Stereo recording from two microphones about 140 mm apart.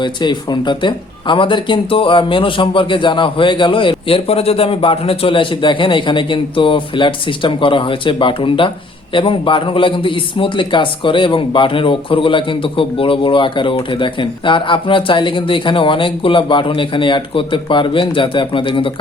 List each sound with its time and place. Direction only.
0.0 s speech: 35° left (ahead or behind)